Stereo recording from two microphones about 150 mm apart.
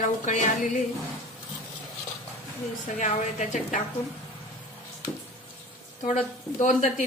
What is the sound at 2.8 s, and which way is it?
Speech, 50° left (ahead or behind).